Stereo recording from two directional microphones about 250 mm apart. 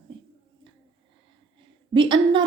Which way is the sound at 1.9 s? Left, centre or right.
Centre.